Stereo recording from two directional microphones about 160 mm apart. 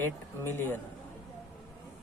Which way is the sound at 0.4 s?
15° left (ahead or behind).